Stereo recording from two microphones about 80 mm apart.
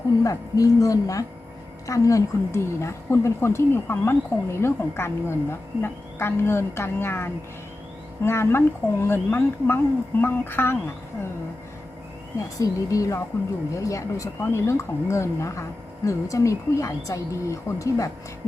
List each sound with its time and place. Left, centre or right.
0.3 s a woman's voice: left
12.4 s a woman's voice: left